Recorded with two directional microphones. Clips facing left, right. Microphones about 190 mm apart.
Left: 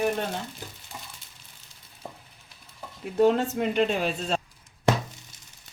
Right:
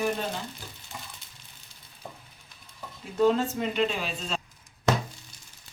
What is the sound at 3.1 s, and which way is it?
Speech, 55° left (ahead or behind).